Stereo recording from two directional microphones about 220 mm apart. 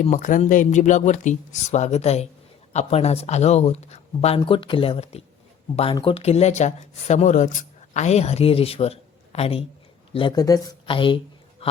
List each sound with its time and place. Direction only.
0.0 s speech: 35° left (ahead or behind)